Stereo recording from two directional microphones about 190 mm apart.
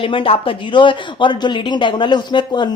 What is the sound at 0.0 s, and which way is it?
Speech, 30° left (ahead or behind).